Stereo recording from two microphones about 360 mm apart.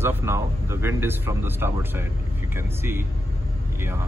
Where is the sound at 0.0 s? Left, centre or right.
Centre.